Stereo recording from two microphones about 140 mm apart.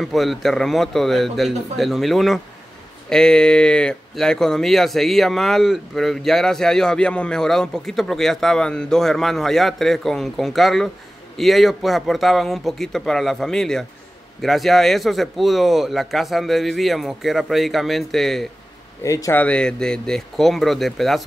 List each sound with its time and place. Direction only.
0.0 s speech: centre (ahead or behind)
19.0 s speech: 25° left (ahead or behind)
19.3 s speech: 10° left (ahead or behind)